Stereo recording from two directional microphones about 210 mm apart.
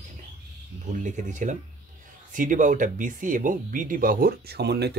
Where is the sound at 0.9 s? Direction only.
35° right (ahead or behind).